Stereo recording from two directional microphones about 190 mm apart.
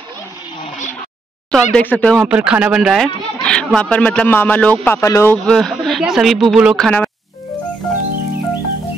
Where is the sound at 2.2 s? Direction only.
5° right (ahead or behind).